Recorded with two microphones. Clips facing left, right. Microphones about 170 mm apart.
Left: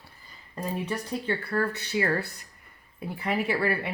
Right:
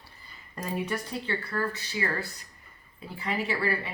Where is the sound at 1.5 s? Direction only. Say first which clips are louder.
Left 3 dB; 60° left (ahead or behind).